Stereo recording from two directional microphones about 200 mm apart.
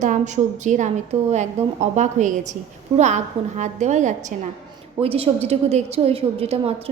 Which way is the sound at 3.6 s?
35° right (ahead or behind).